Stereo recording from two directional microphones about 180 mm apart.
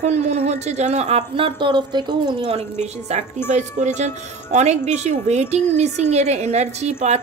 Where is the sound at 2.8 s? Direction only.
40° right (ahead or behind).